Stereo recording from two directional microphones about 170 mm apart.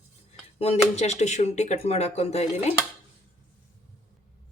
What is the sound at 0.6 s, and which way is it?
Speech, 40° left (ahead or behind).